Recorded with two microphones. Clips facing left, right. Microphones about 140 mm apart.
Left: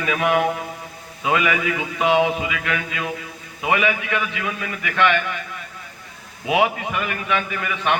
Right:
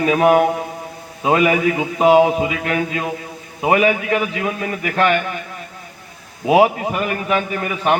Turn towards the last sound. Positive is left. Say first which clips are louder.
# right 4 dB
turn(degrees=-40)  # may be behind; listen again after turning